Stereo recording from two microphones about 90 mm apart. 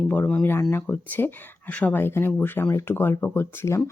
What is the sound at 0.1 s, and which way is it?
Speech, 15° left (ahead or behind).